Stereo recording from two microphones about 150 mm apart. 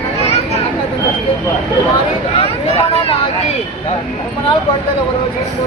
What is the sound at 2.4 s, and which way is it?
Speech, 40° left (ahead or behind).